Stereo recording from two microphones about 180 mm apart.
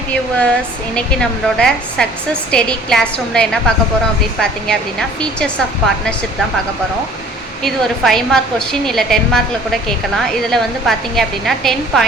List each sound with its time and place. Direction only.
0.1 s a woman's voice: 5° left (ahead or behind)
7.6 s a woman's voice: centre (ahead or behind)
10.5 s a woman's voice: centre (ahead or behind)